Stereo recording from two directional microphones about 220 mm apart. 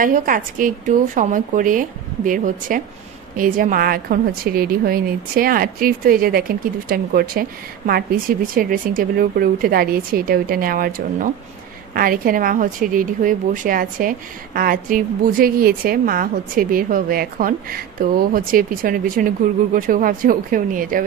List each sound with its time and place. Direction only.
0.0 s a woman's voice: 40° right (ahead or behind)